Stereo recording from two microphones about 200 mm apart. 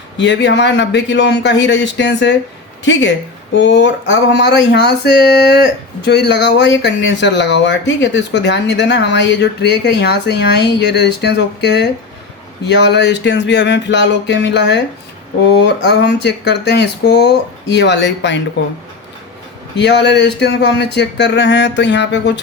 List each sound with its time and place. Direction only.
0.2 s speech: 60° left (ahead or behind)
19.7 s speech: 60° left (ahead or behind)